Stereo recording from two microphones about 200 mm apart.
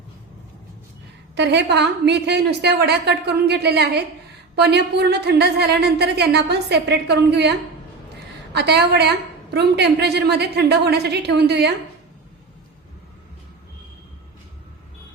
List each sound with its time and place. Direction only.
1.4 s a woman's voice: 60° right (ahead or behind)
8.5 s a woman's voice: 55° right (ahead or behind)